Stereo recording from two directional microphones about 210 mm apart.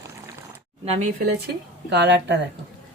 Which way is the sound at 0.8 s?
30° right (ahead or behind).